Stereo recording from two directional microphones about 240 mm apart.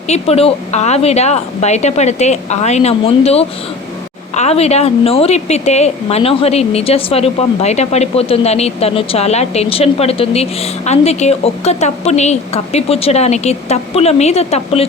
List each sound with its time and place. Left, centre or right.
0.1 s a woman's voice: left